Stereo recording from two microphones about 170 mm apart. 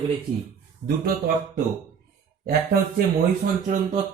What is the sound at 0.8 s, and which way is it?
Speech, 55° right (ahead or behind).